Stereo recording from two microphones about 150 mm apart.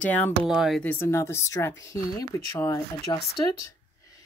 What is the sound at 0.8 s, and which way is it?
Speech, 15° left (ahead or behind).